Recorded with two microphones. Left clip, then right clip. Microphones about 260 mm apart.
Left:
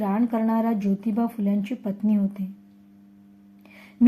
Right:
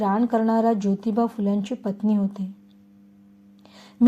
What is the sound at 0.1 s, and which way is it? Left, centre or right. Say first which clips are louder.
Speech: right 3 dB; centre.